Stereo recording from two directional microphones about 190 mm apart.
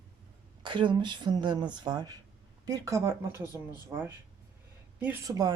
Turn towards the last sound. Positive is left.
turn(degrees=-20)  # may be behind; listen again after turning